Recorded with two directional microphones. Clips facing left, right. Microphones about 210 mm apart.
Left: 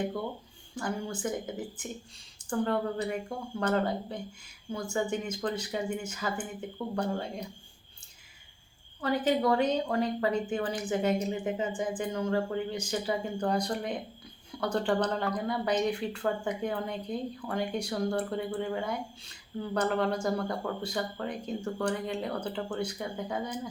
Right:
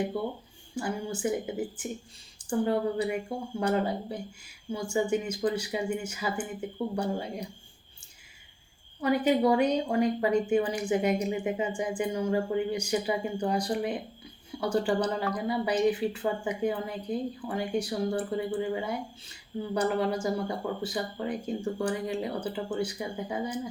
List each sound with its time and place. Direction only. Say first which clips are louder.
0.8 s speech: right 2 dB; 10° right (ahead or behind)
9.0 s speech: right 3 dB; 10° right (ahead or behind)